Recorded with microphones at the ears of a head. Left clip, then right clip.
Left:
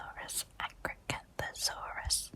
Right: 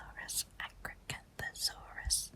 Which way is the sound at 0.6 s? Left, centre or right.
Left.